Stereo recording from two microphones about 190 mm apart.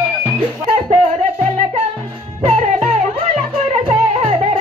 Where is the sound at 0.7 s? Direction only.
35° right (ahead or behind).